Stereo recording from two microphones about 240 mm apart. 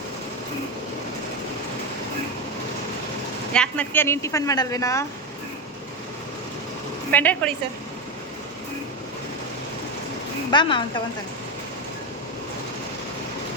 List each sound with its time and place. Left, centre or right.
3.5 s speech: centre
7.1 s speech: centre
10.5 s a woman's voice: centre